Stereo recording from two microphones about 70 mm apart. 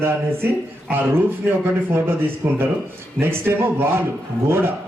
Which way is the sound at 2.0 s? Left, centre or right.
Right.